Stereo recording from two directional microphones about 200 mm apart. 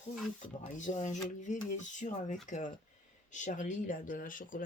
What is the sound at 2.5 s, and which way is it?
Speech, 40° left (ahead or behind).